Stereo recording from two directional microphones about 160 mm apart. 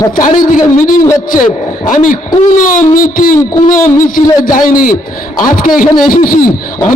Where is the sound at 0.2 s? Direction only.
55° left (ahead or behind).